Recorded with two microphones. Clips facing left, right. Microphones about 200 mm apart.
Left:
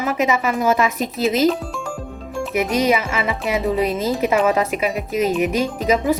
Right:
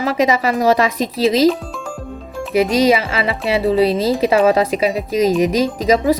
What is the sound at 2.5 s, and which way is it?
Speech, 30° right (ahead or behind).